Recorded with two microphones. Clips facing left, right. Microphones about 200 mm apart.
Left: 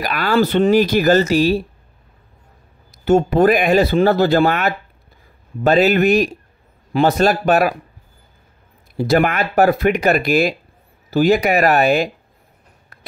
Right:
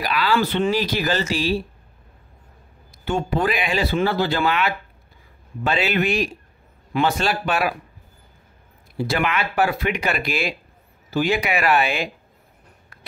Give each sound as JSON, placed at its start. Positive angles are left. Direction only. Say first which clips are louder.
{"t": 0.0, "sound": "speech", "louder": "left 4 dB", "side_deg": 45}
{"t": 3.1, "sound": "speech", "louder": "left 9 dB", "side_deg": 45}
{"t": 8.9, "sound": "speech", "louder": "left 7 dB", "side_deg": 40}